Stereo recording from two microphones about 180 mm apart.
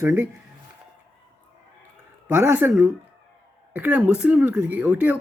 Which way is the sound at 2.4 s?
10° right (ahead or behind).